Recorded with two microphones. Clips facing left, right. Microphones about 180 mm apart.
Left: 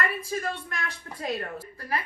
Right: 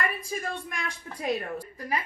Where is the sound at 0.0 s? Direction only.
15° right (ahead or behind).